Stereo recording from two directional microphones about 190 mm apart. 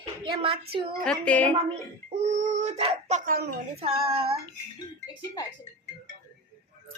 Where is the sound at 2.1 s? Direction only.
35° right (ahead or behind).